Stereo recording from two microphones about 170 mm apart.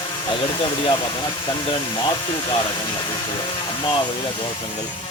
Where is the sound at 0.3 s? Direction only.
30° left (ahead or behind).